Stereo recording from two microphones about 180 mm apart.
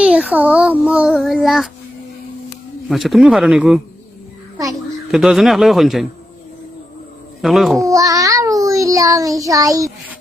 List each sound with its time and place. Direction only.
0.0 s a child's voice: 5° right (ahead or behind)
2.9 s speech: centre (ahead or behind)
5.1 s speech: centre (ahead or behind)
7.4 s speech: centre (ahead or behind)
7.9 s child singing: 20° right (ahead or behind)
9.4 s a child's voice: 20° right (ahead or behind)